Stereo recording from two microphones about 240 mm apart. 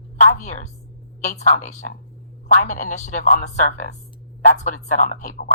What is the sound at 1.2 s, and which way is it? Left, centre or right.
Speech, left.